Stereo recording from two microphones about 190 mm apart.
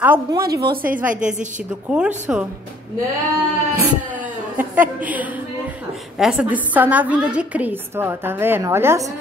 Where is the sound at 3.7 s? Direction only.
10° right (ahead or behind).